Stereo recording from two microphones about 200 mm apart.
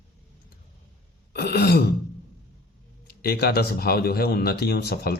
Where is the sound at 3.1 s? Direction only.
50° left (ahead or behind).